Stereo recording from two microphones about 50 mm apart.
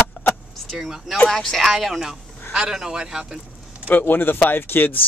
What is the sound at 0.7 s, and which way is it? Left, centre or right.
Speech, centre.